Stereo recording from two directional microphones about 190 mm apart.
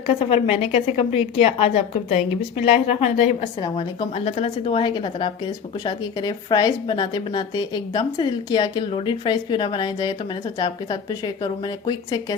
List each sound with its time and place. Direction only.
0.3 s speech: 30° left (ahead or behind)
3.6 s a woman's voice: 25° left (ahead or behind)